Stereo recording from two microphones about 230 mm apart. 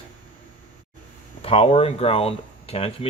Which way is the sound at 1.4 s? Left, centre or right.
Left.